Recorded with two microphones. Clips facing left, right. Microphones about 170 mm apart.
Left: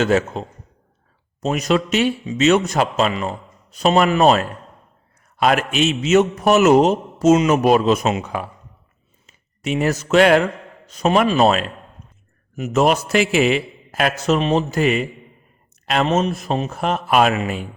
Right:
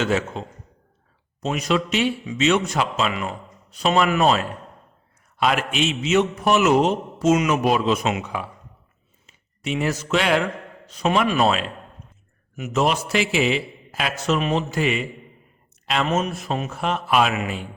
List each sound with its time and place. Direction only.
0.0 s a man's voice: 40° left (ahead or behind)
5.4 s a man's voice: 45° left (ahead or behind)
12.5 s a man's voice: 45° left (ahead or behind)
16.0 s speech: 35° left (ahead or behind)